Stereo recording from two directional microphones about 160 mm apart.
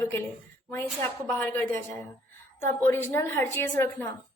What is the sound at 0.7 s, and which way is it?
A woman's voice, 15° left (ahead or behind).